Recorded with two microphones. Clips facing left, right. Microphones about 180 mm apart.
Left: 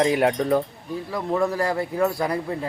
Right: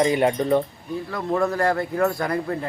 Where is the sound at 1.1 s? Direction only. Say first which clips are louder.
Even; 10° left (ahead or behind).